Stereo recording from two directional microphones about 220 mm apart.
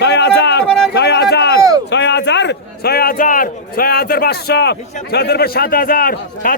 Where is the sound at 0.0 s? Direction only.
50° left (ahead or behind).